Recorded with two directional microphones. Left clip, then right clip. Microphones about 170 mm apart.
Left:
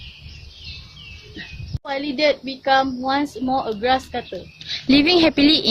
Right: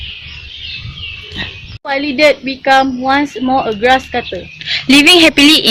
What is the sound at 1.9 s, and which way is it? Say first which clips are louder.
A woman's voice: right 9 dB; 40° right (ahead or behind).